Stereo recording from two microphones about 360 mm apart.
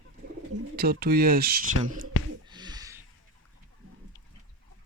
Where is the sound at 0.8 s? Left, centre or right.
Right.